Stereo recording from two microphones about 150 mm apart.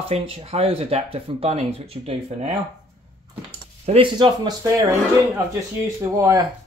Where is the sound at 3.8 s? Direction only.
40° right (ahead or behind).